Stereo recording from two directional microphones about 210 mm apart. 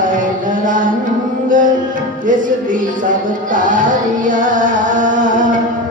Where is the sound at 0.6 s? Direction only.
40° right (ahead or behind).